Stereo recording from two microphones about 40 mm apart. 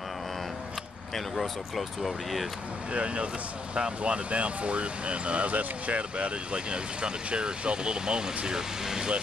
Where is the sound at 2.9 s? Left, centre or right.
Right.